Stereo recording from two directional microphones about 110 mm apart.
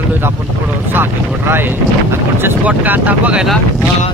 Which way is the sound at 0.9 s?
20° right (ahead or behind).